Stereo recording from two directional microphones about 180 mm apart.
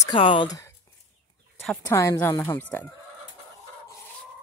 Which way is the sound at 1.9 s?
15° left (ahead or behind).